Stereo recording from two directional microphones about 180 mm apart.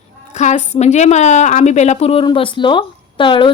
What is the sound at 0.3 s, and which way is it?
A woman's voice, 40° left (ahead or behind).